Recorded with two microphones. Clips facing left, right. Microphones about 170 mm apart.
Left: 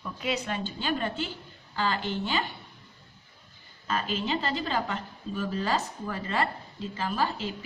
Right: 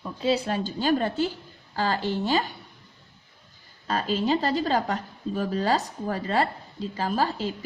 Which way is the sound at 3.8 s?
35° right (ahead or behind).